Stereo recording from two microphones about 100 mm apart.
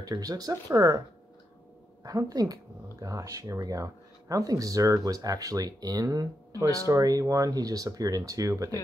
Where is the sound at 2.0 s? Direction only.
35° right (ahead or behind).